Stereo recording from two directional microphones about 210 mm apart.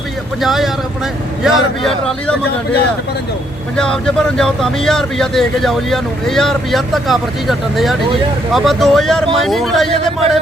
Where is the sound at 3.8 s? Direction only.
5° left (ahead or behind).